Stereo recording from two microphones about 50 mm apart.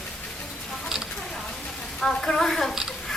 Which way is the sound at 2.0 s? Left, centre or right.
Centre.